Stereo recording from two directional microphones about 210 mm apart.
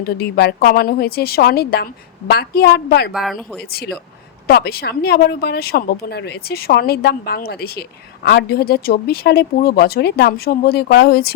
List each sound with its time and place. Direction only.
0.0 s speech: 45° left (ahead or behind)
3.1 s speech: centre (ahead or behind)
3.6 s speech: 50° left (ahead or behind)